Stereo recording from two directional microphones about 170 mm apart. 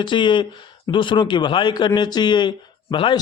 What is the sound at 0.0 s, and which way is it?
Speech, 25° left (ahead or behind).